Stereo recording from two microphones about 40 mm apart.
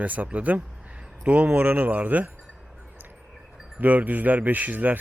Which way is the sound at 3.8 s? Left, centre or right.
Right.